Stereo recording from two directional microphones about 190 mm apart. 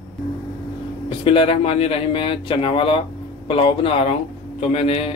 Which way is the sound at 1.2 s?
25° left (ahead or behind).